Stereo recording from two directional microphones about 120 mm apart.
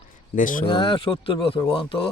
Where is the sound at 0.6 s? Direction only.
45° left (ahead or behind).